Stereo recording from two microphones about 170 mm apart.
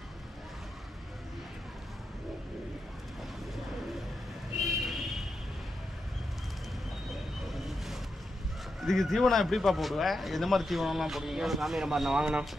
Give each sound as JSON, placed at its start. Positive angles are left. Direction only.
{"t": 4.8, "sound": "a sound", "side_deg": 0}
{"t": 7.5, "sound": "vehicle", "side_deg": 0}
{"t": 8.8, "sound": "speech", "side_deg": 0}